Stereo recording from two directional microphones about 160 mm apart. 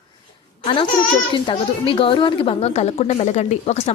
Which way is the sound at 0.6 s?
30° left (ahead or behind).